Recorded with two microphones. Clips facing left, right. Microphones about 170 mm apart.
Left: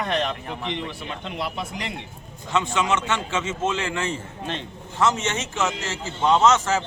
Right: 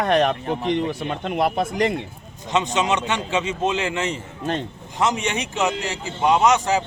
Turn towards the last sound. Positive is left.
turn(degrees=-15)  # may be behind; listen again after turning